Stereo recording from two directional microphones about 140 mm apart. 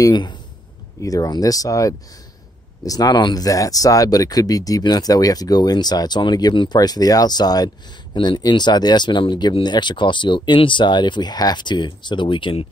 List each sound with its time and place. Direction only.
0.0 s speech: 30° left (ahead or behind)